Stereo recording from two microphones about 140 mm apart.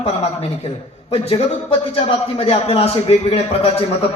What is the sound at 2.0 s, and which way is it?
A man's voice, 45° left (ahead or behind).